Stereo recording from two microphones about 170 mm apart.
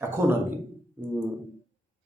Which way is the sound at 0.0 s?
15° right (ahead or behind).